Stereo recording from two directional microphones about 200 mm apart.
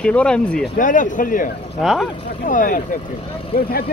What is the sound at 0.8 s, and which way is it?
Speech, 40° left (ahead or behind).